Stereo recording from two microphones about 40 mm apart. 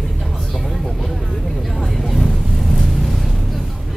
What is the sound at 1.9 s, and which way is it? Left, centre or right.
Vehicle, centre.